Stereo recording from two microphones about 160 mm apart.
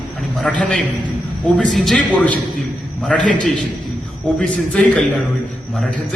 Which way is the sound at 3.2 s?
55° left (ahead or behind).